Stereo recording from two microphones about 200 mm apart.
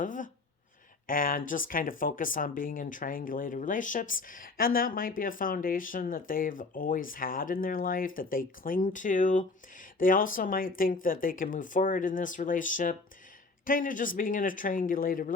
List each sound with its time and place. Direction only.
0.0 s speech: 40° left (ahead or behind)